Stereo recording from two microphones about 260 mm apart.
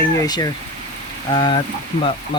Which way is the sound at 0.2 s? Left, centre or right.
Centre.